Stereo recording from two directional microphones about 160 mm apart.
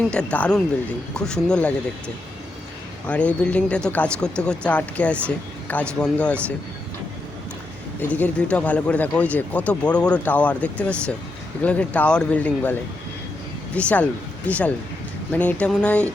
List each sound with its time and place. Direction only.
0.0 s speech: 5° left (ahead or behind)
3.1 s speech: 10° left (ahead or behind)
8.0 s speech: 10° left (ahead or behind)
13.7 s speech: 10° left (ahead or behind)